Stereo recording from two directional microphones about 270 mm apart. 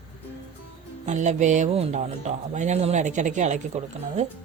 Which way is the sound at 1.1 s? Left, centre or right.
Right.